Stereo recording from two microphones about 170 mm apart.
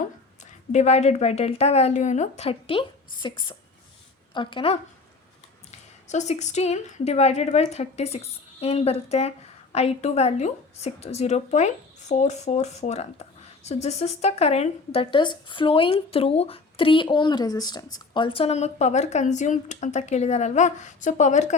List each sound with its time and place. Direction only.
0.7 s a woman's voice: 40° left (ahead or behind)
6.1 s speech: 40° left (ahead or behind)